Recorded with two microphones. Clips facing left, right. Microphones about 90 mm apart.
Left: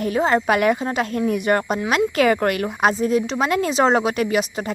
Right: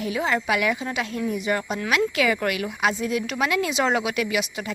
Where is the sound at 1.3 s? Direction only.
55° left (ahead or behind).